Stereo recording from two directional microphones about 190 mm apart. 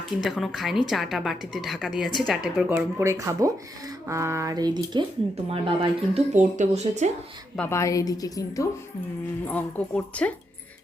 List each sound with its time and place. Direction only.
0.2 s a woman's voice: centre (ahead or behind)
3.0 s speech: 15° right (ahead or behind); by 7.1 s 40° right (ahead or behind)
7.5 s a woman's voice: 10° left (ahead or behind)